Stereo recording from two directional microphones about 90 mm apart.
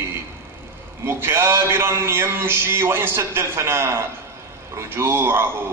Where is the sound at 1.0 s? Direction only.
25° right (ahead or behind).